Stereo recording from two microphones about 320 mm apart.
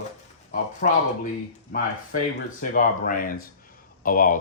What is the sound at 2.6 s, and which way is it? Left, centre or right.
Speech, left.